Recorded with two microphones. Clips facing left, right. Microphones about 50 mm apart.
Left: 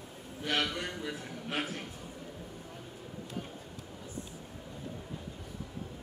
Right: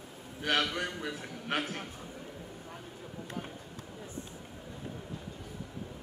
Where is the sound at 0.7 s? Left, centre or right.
Right.